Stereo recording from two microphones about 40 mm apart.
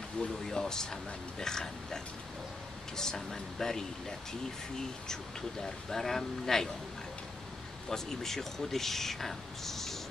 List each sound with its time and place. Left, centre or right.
0.2 s speech: centre
3.0 s speech: centre
5.0 s speech: centre
7.9 s speech: centre